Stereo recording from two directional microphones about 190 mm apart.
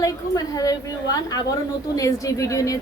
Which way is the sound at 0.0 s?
20° left (ahead or behind).